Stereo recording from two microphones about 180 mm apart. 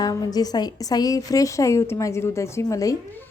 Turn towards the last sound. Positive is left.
turn(degrees=15)  # may be behind; listen again after turning